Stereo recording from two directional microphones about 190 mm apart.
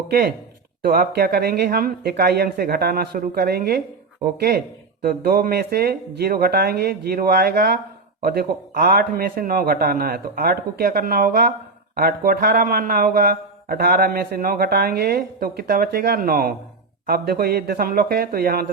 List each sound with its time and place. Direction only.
0.1 s speech: 50° right (ahead or behind)
5.0 s speech: 50° right (ahead or behind)